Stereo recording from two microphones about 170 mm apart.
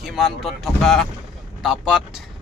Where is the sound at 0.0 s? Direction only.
Centre (ahead or behind).